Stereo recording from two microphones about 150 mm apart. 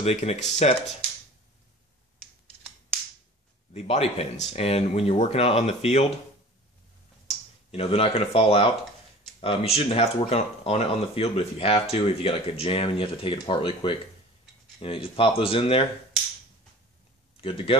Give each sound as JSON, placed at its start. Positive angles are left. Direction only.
{"t": 0.0, "sound": "speech", "side_deg": 45}
{"t": 3.7, "sound": "speech", "side_deg": 45}
{"t": 7.2, "sound": "speech", "side_deg": 40}
{"t": 17.4, "sound": "speech", "side_deg": 40}